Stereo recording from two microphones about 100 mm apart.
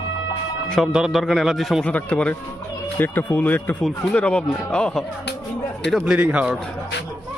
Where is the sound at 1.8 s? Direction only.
15° left (ahead or behind).